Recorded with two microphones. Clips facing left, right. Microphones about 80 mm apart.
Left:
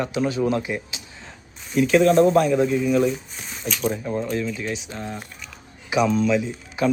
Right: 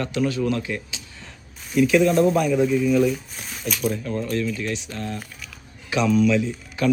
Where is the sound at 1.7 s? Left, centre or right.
Centre.